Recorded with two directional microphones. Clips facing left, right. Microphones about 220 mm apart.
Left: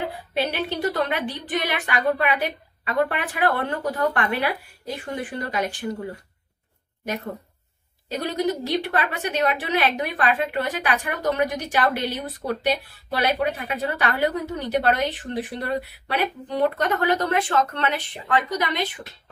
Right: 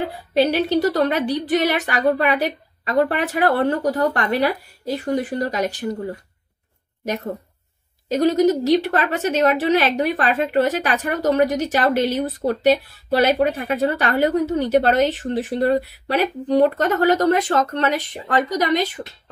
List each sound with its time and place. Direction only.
0.3 s a woman's voice: 40° right (ahead or behind)
8.1 s a woman's voice: 40° right (ahead or behind)